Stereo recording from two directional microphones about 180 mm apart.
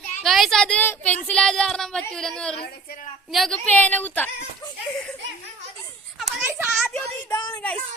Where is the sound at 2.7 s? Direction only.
55° left (ahead or behind).